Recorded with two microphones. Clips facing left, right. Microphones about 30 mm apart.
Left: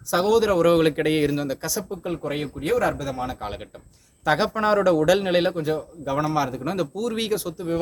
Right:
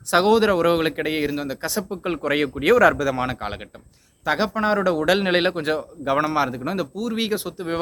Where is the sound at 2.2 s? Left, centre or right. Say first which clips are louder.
Right 8 dB; right.